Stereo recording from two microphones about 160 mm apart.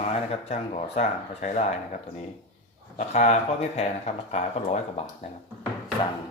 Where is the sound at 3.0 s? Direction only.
45° left (ahead or behind).